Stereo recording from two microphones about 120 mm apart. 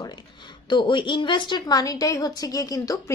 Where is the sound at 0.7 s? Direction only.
45° left (ahead or behind).